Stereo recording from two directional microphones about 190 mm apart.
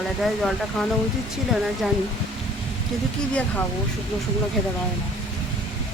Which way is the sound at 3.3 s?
5° left (ahead or behind).